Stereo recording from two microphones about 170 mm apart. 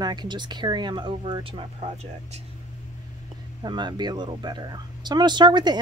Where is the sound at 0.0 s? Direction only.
25° right (ahead or behind).